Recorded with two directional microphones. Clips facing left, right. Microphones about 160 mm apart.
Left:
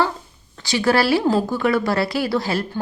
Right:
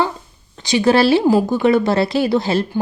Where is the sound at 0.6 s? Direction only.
20° right (ahead or behind).